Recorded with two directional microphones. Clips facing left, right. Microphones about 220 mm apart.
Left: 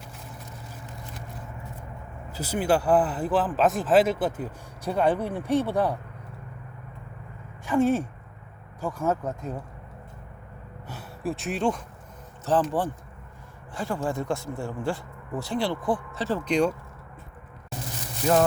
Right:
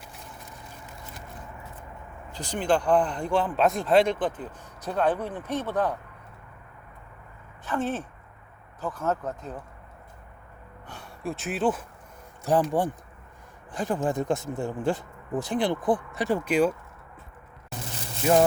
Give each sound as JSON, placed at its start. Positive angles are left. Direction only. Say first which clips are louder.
{"t": 2.3, "sound": "speech", "louder": "left 1 dB", "side_deg": 5}
{"t": 7.6, "sound": "speech", "louder": "left 7 dB", "side_deg": 10}
{"t": 10.8, "sound": "speech", "louder": "left 3 dB", "side_deg": 5}
{"t": 12.5, "sound": "speech", "louder": "right 1 dB", "side_deg": -15}
{"t": 13.7, "sound": "speech", "louder": "right 2 dB", "side_deg": -20}
{"t": 18.2, "sound": "speech", "louder": "right 1 dB", "side_deg": -10}